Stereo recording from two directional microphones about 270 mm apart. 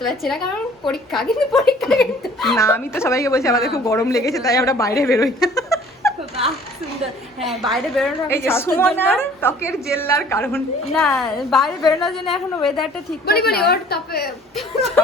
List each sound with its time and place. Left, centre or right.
0.9 s a woman's voice: centre
4.9 s a sound: centre
7.4 s a woman's voice: centre
13.2 s a woman's voice: left